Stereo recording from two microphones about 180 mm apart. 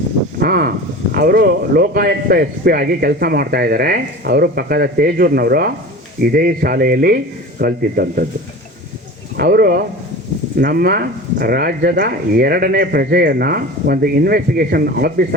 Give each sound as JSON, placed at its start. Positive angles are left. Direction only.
{"t": 0.4, "sound": "speech", "side_deg": -60}
{"t": 9.4, "sound": "speech", "side_deg": -60}